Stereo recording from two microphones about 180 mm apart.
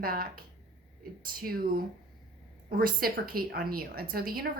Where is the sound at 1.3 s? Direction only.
55° right (ahead or behind).